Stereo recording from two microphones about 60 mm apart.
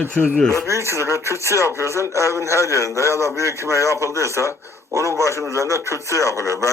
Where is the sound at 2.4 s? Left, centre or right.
Right.